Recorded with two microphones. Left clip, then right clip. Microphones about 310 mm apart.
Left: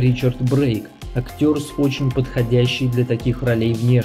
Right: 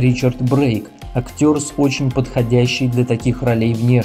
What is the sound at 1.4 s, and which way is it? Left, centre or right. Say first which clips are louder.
Speech: right 3 dB; centre.